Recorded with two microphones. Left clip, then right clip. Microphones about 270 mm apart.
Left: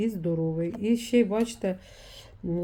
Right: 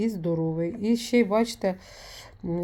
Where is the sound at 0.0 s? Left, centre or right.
Centre.